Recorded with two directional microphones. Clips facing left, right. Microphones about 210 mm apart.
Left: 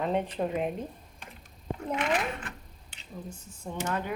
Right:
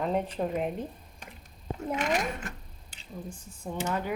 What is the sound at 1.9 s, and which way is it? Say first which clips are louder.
Speech: even; 40° right (ahead or behind).